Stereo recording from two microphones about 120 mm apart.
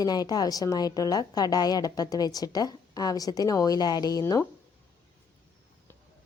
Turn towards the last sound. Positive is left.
turn(degrees=25)  # may be behind; listen again after turning